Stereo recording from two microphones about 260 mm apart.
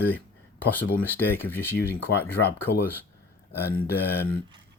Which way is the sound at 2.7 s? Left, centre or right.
Left.